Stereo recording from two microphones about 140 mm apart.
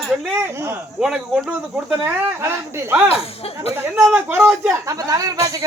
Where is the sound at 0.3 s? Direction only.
15° right (ahead or behind).